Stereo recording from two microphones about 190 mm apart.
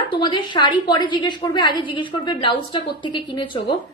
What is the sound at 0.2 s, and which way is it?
A woman's voice, 25° left (ahead or behind).